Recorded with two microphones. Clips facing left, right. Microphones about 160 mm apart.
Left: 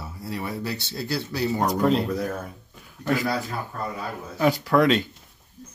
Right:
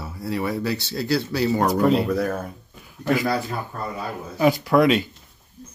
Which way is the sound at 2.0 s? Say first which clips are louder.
Right 4 dB; 70° right (ahead or behind).